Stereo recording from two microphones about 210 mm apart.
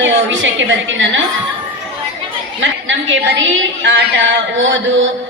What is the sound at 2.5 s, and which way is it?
A woman's voice, 65° right (ahead or behind).